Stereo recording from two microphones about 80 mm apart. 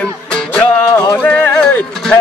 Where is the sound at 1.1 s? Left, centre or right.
Left.